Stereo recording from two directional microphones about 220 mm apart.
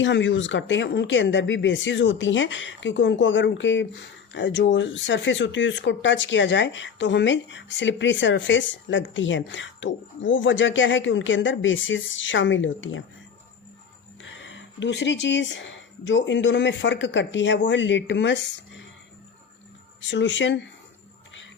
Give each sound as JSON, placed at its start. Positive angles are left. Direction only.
{"t": 0.0, "sound": "speech", "side_deg": 55}
{"t": 14.2, "sound": "speech", "side_deg": 60}
{"t": 20.1, "sound": "speech", "side_deg": 55}